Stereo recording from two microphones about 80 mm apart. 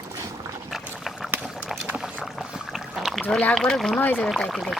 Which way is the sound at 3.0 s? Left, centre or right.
Centre.